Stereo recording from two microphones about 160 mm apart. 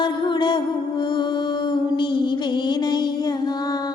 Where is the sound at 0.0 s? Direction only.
30° left (ahead or behind).